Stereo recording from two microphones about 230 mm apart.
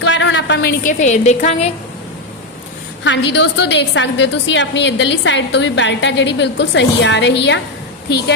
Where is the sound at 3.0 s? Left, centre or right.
Left.